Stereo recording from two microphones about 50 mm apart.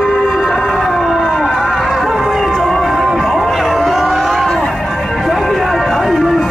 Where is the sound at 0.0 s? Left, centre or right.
Centre.